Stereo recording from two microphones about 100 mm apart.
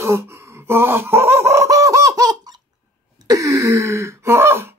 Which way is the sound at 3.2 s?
35° right (ahead or behind).